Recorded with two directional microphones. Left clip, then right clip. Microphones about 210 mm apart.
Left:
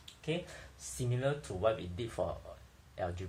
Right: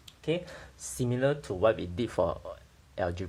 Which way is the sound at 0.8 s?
50° right (ahead or behind).